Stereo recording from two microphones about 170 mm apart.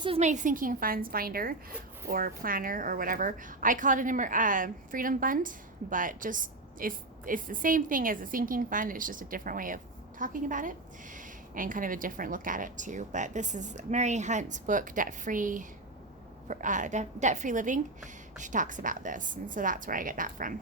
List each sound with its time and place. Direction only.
0.0 s a woman's voice: 40° right (ahead or behind)